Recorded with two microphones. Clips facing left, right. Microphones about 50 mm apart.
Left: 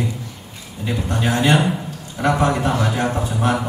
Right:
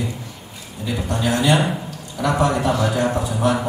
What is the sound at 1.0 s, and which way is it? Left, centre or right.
Speech, left.